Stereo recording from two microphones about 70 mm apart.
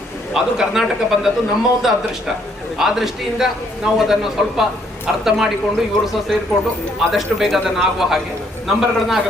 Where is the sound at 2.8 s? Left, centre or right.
Centre.